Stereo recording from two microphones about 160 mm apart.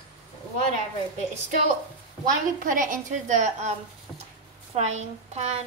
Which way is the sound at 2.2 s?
55° right (ahead or behind).